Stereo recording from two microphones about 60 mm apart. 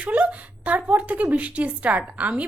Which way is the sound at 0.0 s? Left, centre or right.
Right.